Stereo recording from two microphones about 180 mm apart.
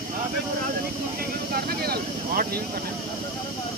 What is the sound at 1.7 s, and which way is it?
Vehicle, 55° right (ahead or behind).